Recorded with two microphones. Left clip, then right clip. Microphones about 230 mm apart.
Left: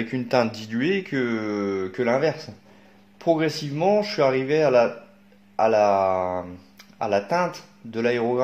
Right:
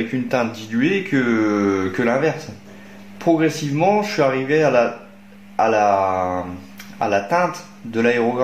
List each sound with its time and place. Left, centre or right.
0.1 s speech: left
3.2 s speech: left